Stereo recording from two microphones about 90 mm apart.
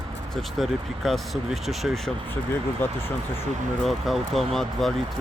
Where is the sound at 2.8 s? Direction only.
25° left (ahead or behind).